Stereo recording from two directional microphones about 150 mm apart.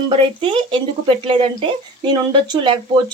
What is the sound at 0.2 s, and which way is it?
Speech, 35° right (ahead or behind).